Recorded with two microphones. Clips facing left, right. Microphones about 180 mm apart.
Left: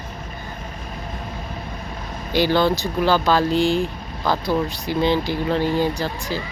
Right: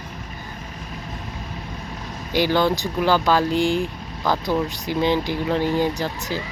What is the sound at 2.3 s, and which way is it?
Speech, 15° right (ahead or behind).